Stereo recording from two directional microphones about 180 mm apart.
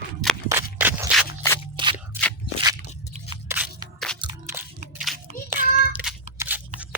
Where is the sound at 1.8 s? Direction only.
30° right (ahead or behind).